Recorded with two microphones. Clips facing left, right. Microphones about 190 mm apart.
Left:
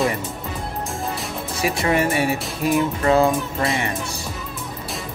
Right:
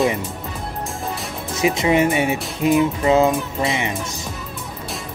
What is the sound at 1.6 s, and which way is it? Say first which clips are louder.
Speech: right 3 dB; 20° right (ahead or behind).